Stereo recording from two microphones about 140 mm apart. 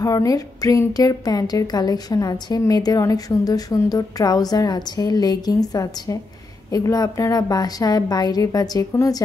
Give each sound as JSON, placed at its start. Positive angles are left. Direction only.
{"t": 0.0, "sound": "a woman's voice", "side_deg": 25}